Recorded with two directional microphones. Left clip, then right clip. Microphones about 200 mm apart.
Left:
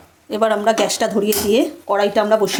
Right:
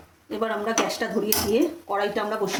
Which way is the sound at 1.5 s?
55° left (ahead or behind).